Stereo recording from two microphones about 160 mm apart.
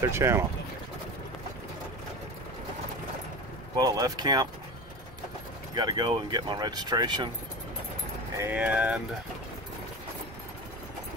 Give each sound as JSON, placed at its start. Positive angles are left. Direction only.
{"t": 0.0, "sound": "speech", "side_deg": -15}
{"t": 3.7, "sound": "speech", "side_deg": -25}
{"t": 5.8, "sound": "speech", "side_deg": -25}
{"t": 8.4, "sound": "speech", "side_deg": -10}